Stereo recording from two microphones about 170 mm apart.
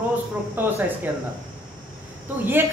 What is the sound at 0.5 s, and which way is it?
Speech, 10° right (ahead or behind).